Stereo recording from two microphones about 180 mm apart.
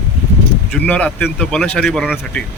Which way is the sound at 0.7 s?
5° left (ahead or behind).